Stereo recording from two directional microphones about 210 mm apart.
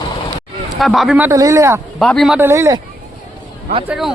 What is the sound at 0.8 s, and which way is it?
Speech, centre (ahead or behind).